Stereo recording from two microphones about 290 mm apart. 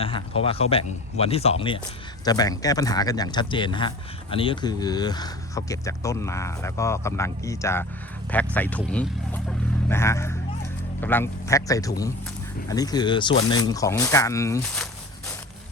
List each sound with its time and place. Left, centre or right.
0.0 s speech: centre